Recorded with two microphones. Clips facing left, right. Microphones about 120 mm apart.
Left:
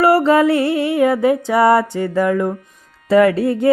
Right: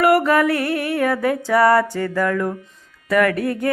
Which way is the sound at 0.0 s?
25° left (ahead or behind).